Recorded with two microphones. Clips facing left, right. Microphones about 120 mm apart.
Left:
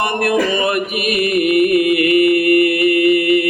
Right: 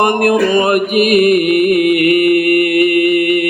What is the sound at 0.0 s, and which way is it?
Male singing, 50° right (ahead or behind).